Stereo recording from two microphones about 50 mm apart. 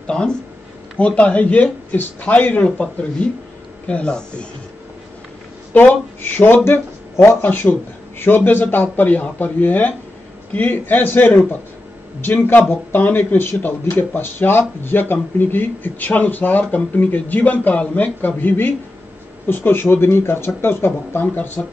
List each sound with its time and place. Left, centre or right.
0.0 s speech: centre
5.7 s speech: left
6.6 s speech: left
12.9 s speech: left